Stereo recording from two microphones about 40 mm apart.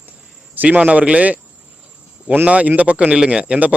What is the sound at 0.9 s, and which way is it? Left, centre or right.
Speech, right.